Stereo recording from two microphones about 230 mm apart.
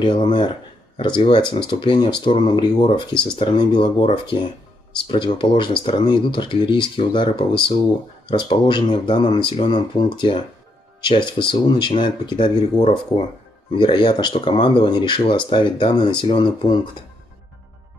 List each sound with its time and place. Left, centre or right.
0.0 s speech: centre